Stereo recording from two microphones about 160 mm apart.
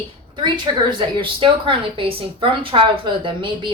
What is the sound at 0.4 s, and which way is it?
Speech, 30° right (ahead or behind).